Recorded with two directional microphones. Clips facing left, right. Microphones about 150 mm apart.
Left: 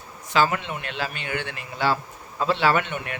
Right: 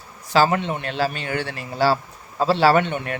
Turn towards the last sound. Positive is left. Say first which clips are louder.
# right 5 dB
turn(degrees=-35)  # may be behind; listen again after turning